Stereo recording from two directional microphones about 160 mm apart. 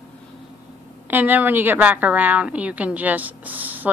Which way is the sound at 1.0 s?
10° right (ahead or behind).